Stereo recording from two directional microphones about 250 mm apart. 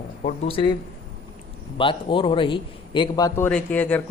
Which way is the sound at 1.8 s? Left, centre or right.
Centre.